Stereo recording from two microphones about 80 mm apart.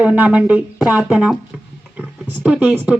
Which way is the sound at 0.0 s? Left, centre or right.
Centre.